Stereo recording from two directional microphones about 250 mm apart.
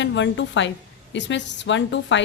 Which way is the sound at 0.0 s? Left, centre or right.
Left.